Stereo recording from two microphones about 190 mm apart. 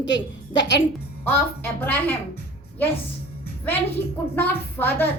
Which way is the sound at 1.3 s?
10° left (ahead or behind).